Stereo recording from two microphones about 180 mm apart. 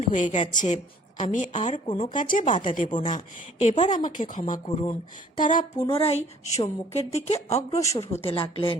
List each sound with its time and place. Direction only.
0.1 s a woman's voice: 40° left (ahead or behind)
4.7 s a woman's voice: 35° left (ahead or behind)
5.4 s speech: 50° left (ahead or behind)
5.8 s a woman's voice: 30° left (ahead or behind)